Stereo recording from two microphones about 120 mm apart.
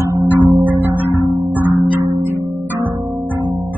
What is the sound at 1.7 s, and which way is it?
Music, 40° right (ahead or behind).